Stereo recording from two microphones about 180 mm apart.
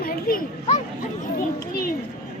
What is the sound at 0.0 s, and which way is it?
Children playing, 55° left (ahead or behind).